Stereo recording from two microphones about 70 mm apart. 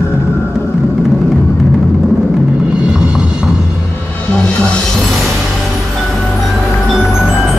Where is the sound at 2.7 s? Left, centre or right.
Centre.